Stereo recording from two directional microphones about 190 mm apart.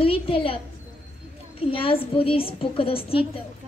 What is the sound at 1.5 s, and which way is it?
A woman's voice, 30° left (ahead or behind).